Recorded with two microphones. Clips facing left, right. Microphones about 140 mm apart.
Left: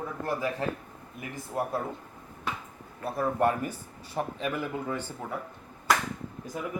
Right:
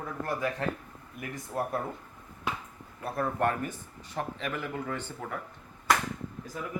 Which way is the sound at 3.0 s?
5° left (ahead or behind).